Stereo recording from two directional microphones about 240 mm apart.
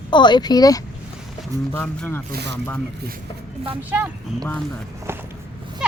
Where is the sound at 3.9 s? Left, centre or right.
Centre.